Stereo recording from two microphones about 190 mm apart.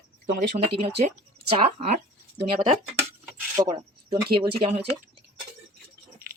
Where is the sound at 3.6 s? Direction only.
25° right (ahead or behind).